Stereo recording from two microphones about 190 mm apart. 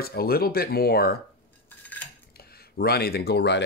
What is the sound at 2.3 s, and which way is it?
Speech, 55° left (ahead or behind).